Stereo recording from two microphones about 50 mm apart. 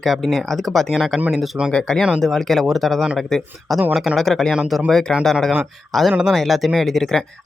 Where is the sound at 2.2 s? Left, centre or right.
Centre.